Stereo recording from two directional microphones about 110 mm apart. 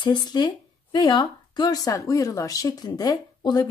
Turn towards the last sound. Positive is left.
turn(degrees=40)  # may be behind; listen again after turning